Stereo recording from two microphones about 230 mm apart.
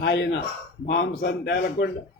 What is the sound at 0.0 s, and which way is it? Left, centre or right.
A man's voice, left.